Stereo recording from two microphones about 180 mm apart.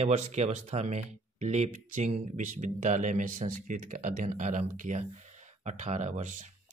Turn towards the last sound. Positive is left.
turn(degrees=-45)  # may be behind; listen again after turning